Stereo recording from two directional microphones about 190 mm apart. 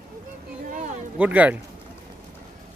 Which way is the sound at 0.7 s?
40° right (ahead or behind).